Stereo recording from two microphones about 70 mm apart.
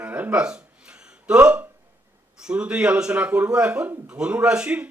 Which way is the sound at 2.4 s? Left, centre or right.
Centre.